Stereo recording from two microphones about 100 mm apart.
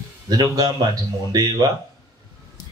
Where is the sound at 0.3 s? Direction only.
40° right (ahead or behind).